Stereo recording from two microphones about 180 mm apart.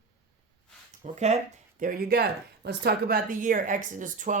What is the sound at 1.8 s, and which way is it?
Speech, 55° right (ahead or behind).